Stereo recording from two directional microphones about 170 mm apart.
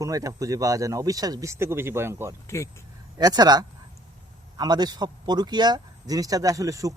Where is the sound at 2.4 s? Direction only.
15° left (ahead or behind).